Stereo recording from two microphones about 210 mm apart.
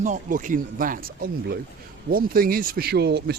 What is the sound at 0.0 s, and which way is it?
Speech, 40° right (ahead or behind).